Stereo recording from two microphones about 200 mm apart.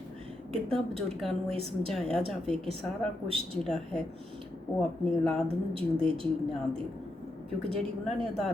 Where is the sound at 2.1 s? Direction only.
5° left (ahead or behind).